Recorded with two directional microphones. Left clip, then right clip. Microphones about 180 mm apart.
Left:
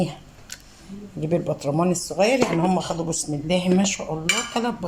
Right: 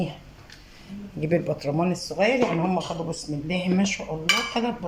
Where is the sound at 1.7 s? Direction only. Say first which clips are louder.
Left 3 dB; 25° left (ahead or behind).